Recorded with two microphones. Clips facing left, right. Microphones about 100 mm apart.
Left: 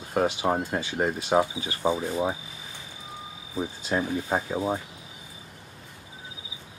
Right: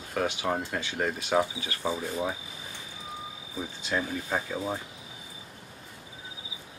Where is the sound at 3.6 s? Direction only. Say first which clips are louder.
Left 4 dB; 30° left (ahead or behind).